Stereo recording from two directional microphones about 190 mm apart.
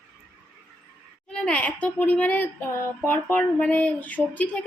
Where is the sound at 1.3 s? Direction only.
5° left (ahead or behind).